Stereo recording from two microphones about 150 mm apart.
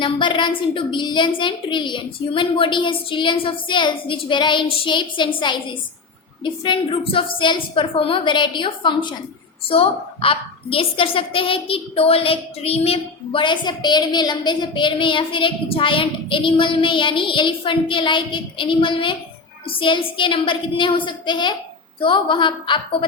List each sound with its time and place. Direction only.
0.0 s a woman's voice: 35° left (ahead or behind)